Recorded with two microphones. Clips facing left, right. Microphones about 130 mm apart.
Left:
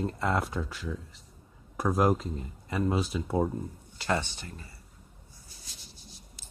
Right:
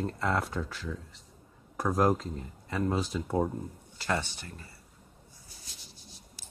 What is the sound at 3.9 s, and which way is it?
Speech, 20° left (ahead or behind).